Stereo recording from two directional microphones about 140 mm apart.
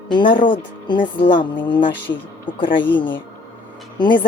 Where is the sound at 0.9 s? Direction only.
35° left (ahead or behind).